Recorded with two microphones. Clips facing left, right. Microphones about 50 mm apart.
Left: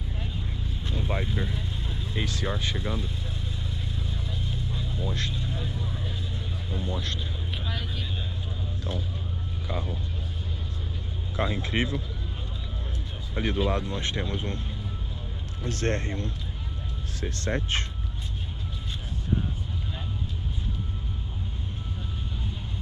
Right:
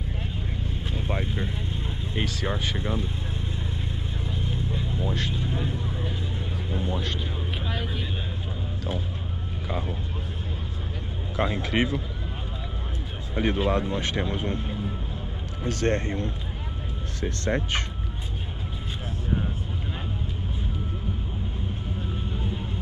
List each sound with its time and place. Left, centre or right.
0.8 s vehicle: centre
1.2 s speech: centre
4.2 s vehicle: right
5.3 s speech: right
11.7 s speech: right
13.4 s speech: right
15.6 s speech: right
17.2 s speech: centre
22.1 s vehicle: right